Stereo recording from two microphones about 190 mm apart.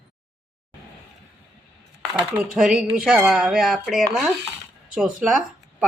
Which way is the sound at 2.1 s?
Centre (ahead or behind).